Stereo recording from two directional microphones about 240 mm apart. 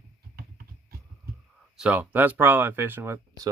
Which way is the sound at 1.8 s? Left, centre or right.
Centre.